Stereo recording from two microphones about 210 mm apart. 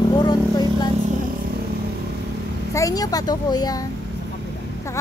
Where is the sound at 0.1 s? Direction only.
20° left (ahead or behind).